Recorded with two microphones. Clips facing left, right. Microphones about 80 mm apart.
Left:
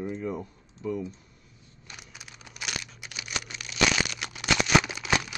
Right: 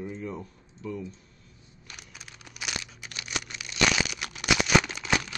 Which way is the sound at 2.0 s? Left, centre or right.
Centre.